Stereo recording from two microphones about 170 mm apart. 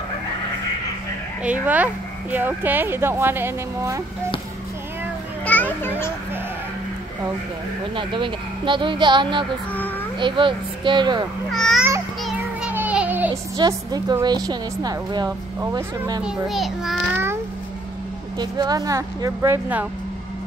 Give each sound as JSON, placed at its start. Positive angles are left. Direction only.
{"t": 1.4, "sound": "a woman's voice", "side_deg": -10}
{"t": 5.4, "sound": "children playing", "side_deg": 10}
{"t": 7.9, "sound": "a woman's voice", "side_deg": -30}
{"t": 11.5, "sound": "a sound", "side_deg": 5}
{"t": 12.2, "sound": "children playing", "side_deg": 0}
{"t": 12.7, "sound": "a sound", "side_deg": -10}
{"t": 13.6, "sound": "a woman's voice", "side_deg": -25}
{"t": 16.2, "sound": "a child's voice", "side_deg": -5}
{"t": 18.4, "sound": "a woman's voice", "side_deg": -25}